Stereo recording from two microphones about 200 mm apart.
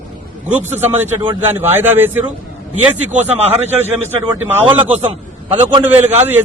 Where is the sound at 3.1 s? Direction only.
35° right (ahead or behind).